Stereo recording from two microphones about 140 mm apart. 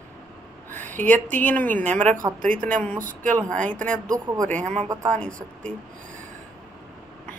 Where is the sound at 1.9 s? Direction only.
60° right (ahead or behind).